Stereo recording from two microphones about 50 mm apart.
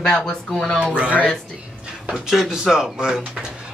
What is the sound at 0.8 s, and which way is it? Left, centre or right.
Speech, right.